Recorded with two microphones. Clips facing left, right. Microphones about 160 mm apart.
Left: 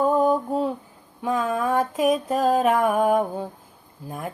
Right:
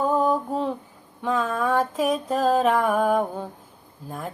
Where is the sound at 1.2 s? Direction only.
15° left (ahead or behind).